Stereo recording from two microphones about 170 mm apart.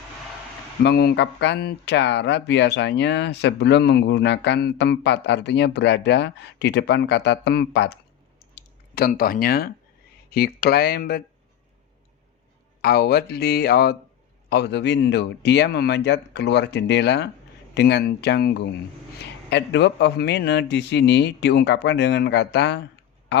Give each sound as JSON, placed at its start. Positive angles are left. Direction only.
{"t": 0.8, "sound": "speech", "side_deg": 70}
{"t": 8.5, "sound": "speech", "side_deg": 60}
{"t": 12.8, "sound": "speech", "side_deg": 65}
{"t": 14.5, "sound": "a man's voice", "side_deg": 80}
{"t": 19.5, "sound": "a man's voice", "side_deg": 90}